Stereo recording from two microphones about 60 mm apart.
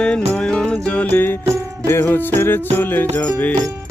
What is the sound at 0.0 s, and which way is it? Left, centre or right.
Music, centre.